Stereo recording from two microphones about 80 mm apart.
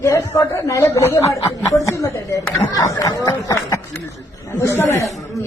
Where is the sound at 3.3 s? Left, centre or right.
Left.